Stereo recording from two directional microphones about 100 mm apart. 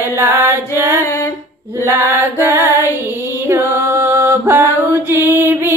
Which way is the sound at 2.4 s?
25° right (ahead or behind).